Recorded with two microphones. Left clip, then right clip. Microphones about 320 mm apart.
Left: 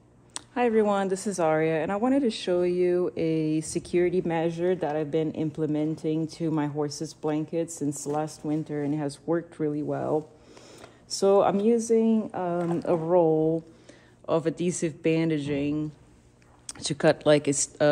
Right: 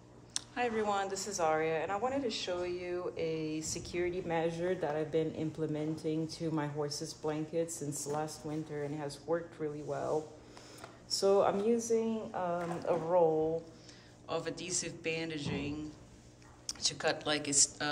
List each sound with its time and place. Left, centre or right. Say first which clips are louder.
0.3 s speech: left 10 dB; left
7.9 s speech: left 7 dB; left
11.1 s speech: left 7 dB; centre